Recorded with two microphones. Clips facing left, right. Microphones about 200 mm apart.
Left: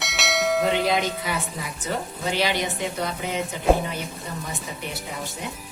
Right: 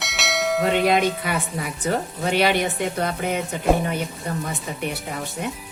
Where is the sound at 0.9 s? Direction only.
60° right (ahead or behind).